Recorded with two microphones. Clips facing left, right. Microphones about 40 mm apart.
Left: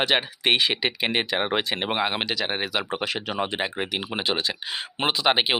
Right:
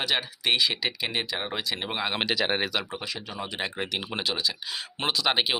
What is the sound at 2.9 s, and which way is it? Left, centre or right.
Speech, left.